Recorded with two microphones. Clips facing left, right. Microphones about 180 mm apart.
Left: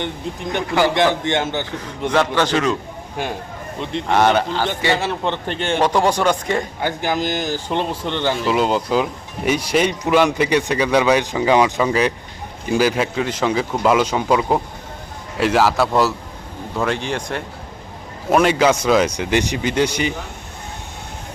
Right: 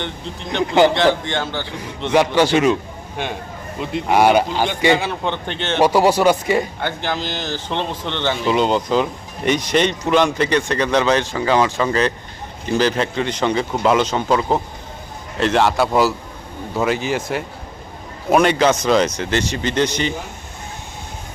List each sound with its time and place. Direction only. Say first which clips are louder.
0.9 s a man's voice: even; 20° left (ahead or behind)
2.0 s speech: right 3 dB; 10° right (ahead or behind)
3.8 s speech: right 1 dB; 10° right (ahead or behind)
4.9 s a man's voice: left 1 dB; centre (ahead or behind)
5.8 s speech: right 4 dB; 5° right (ahead or behind)
6.8 s a man's voice: left 3 dB; 10° left (ahead or behind)